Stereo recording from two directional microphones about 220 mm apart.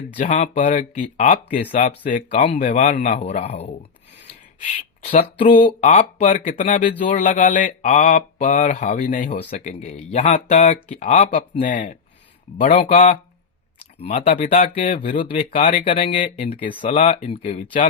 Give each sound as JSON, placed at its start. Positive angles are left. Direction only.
{"t": 0.3, "sound": "speech", "side_deg": 30}
{"t": 5.8, "sound": "speech", "side_deg": 30}